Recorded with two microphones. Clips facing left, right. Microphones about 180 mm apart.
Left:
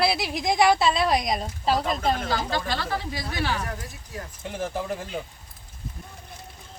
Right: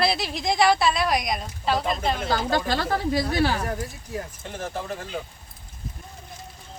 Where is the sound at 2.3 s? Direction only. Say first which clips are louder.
Right 3 dB; 45° right (ahead or behind).